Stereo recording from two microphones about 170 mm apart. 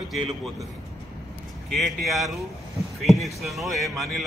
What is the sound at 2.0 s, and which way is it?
A man's voice, centre (ahead or behind).